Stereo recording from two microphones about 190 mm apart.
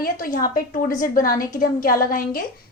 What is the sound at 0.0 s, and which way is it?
A woman's voice, 50° left (ahead or behind).